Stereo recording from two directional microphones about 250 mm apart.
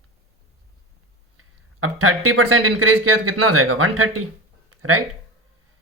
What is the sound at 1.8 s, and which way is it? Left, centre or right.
Speech, right.